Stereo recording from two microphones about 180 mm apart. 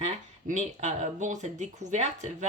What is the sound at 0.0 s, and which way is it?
Speech, 40° right (ahead or behind).